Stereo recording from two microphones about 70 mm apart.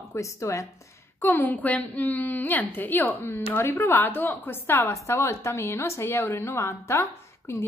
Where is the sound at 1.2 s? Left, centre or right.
Left.